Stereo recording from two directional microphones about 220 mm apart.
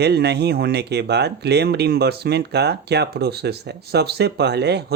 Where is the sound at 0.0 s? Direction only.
50° right (ahead or behind).